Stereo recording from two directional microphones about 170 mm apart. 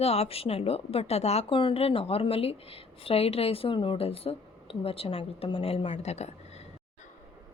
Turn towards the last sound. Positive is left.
turn(degrees=40)  # may be behind; listen again after turning